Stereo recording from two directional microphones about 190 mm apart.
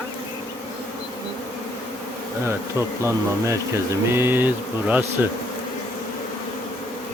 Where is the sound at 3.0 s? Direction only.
15° right (ahead or behind).